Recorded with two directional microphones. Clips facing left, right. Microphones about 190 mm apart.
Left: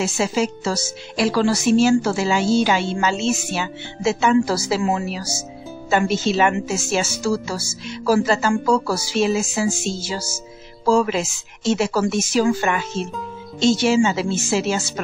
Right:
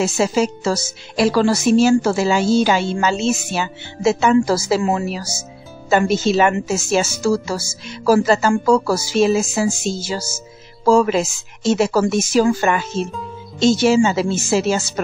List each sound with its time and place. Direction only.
0.0 s a woman's voice: 40° right (ahead or behind)